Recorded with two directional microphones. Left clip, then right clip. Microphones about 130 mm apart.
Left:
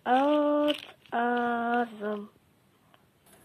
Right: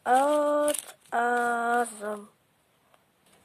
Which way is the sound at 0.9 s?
30° right (ahead or behind).